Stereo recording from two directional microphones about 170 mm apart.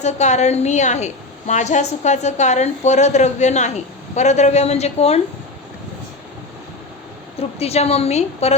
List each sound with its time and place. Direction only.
0.0 s a woman's voice: 45° left (ahead or behind)
7.6 s a woman's voice: 40° left (ahead or behind)